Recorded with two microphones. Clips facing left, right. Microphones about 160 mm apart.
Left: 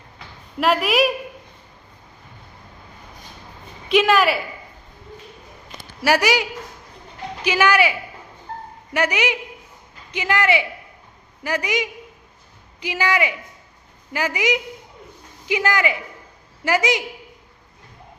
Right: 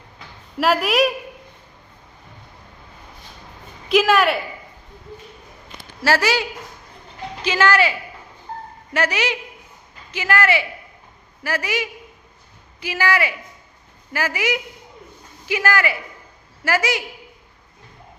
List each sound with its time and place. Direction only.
0.6 s a woman's voice: centre (ahead or behind)
3.8 s a woman's voice: centre (ahead or behind)
6.0 s speech: 15° left (ahead or behind)